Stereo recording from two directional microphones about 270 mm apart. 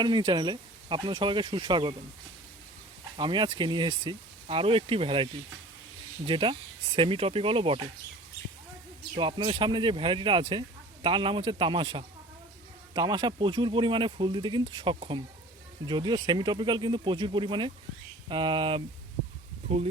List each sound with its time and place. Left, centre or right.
0.0 s speech: centre
3.2 s speech: centre
9.1 s speech: centre